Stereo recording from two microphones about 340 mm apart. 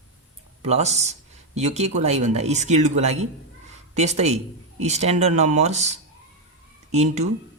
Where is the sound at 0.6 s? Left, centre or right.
Centre.